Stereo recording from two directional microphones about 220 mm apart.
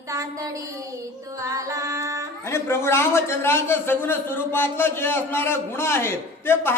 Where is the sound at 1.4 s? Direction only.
15° right (ahead or behind).